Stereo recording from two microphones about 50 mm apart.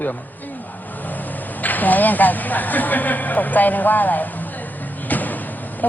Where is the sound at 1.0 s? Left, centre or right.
Left.